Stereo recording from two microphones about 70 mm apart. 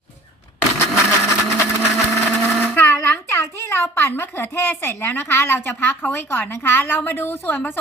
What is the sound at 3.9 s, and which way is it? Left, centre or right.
A woman's voice, left.